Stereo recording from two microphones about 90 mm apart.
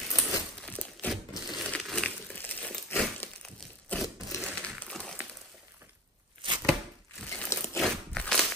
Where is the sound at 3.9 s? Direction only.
15° left (ahead or behind).